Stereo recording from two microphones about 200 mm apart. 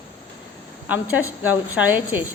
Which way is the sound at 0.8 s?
10° right (ahead or behind).